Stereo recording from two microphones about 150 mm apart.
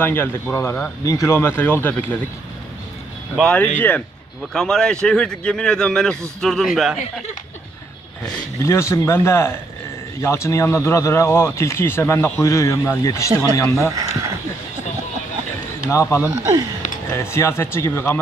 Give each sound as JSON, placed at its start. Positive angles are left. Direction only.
{"t": 0.0, "sound": "speech", "side_deg": 15}
{"t": 3.3, "sound": "speech", "side_deg": 10}
{"t": 8.6, "sound": "speech", "side_deg": 20}
{"t": 13.8, "sound": "speech", "side_deg": -20}
{"t": 15.9, "sound": "speech", "side_deg": 20}
{"t": 16.3, "sound": "speech", "side_deg": -20}
{"t": 17.1, "sound": "speech", "side_deg": 20}